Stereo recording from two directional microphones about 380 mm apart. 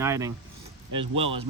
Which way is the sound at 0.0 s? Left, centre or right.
Centre.